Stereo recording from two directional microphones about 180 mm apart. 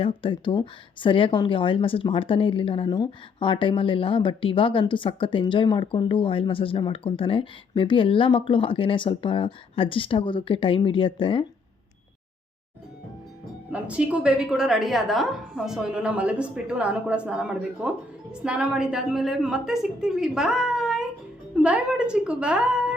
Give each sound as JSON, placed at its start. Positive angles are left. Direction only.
{"t": 0.0, "sound": "speech", "side_deg": 30}
{"t": 13.7, "sound": "a woman's voice", "side_deg": -5}